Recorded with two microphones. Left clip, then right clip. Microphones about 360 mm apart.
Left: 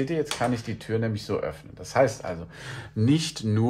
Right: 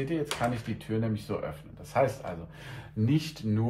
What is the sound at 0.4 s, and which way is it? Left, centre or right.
Speech, left.